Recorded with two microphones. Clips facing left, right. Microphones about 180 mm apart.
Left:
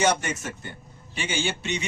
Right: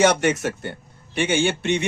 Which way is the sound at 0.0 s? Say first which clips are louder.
Right 6 dB; 75° right (ahead or behind).